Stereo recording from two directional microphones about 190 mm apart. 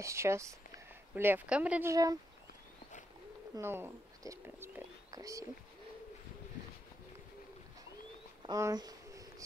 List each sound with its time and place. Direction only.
0.0 s speech: 15° right (ahead or behind)
3.5 s speech: 10° right (ahead or behind)
8.4 s a sound: 20° right (ahead or behind)